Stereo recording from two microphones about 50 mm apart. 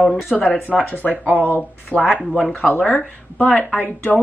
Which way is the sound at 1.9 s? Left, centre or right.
Left.